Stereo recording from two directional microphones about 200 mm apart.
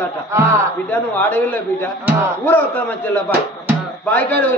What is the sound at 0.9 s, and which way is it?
A man's voice, 10° left (ahead or behind).